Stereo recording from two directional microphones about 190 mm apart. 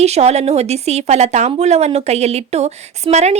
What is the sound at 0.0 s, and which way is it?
A woman's voice, 35° right (ahead or behind).